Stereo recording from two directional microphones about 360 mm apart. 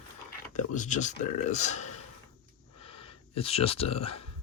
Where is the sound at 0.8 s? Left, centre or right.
Centre.